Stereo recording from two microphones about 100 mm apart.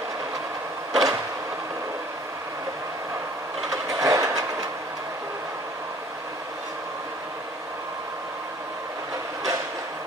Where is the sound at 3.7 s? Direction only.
35° right (ahead or behind).